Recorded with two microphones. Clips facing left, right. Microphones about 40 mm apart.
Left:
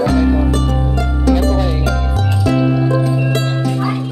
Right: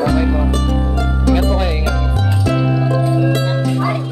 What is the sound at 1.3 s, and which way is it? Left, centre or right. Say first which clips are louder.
Music: left 2 dB; right.